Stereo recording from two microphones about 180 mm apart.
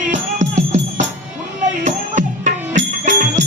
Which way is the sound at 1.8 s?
45° right (ahead or behind).